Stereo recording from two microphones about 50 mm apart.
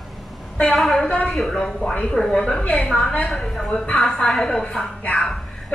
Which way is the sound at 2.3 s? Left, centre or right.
Left.